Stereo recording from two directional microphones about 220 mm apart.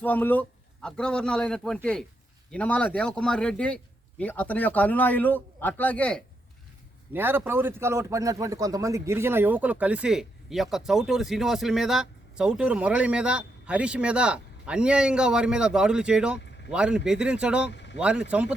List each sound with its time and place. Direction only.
0.0 s a man's voice: 10° left (ahead or behind)
7.1 s a man's voice: 10° right (ahead or behind)
17.7 s speech: 50° left (ahead or behind)
17.9 s a man's voice: 5° right (ahead or behind)